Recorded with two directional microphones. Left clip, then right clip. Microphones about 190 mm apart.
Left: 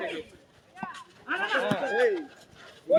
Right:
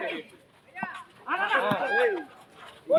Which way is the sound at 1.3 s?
25° left (ahead or behind).